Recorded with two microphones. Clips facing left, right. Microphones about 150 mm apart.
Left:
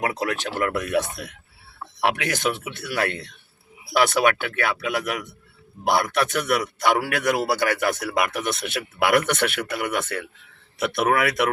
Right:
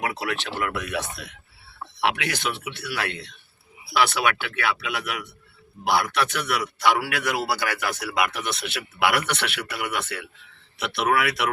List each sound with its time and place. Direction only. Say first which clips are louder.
0.0 s a man's voice: left 3 dB; 45° left (ahead or behind)